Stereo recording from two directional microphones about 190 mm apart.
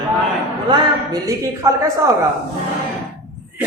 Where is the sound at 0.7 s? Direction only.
20° right (ahead or behind).